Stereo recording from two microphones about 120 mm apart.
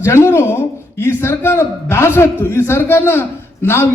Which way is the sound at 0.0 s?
20° left (ahead or behind).